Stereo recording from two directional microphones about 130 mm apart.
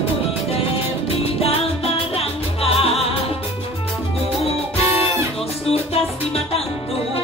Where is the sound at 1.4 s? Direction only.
50° left (ahead or behind).